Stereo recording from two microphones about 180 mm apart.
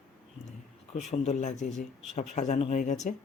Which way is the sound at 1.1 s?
40° left (ahead or behind).